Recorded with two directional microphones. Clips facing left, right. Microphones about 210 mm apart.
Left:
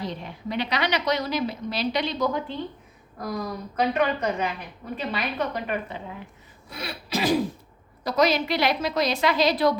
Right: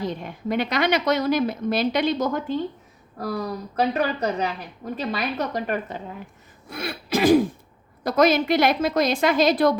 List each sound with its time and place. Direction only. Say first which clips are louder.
0.0 s speech: right 4 dB; 50° right (ahead or behind)
3.2 s a woman's voice: right 3 dB; 35° right (ahead or behind)